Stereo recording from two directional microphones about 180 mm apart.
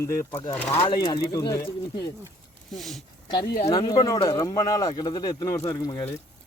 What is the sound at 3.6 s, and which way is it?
Speech, 25° left (ahead or behind).